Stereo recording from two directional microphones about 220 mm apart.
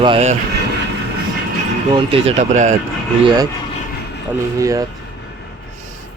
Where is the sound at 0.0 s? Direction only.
25° right (ahead or behind).